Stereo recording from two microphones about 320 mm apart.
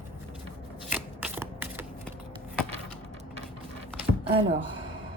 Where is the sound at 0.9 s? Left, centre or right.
Centre.